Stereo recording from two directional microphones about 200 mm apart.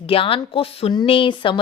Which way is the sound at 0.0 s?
25° left (ahead or behind).